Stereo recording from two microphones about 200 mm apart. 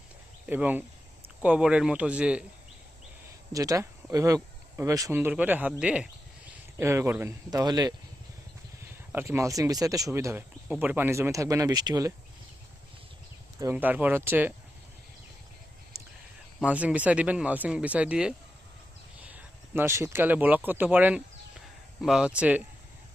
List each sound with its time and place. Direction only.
0.4 s speech: 10° right (ahead or behind)
3.5 s speech: 15° right (ahead or behind)
9.1 s speech: 10° right (ahead or behind)
13.6 s speech: 10° right (ahead or behind)
15.9 s a sound: 15° right (ahead or behind)
16.6 s speech: 5° right (ahead or behind)